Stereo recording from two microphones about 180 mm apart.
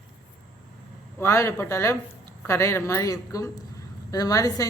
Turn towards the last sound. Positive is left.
turn(degrees=20)  # may be behind; listen again after turning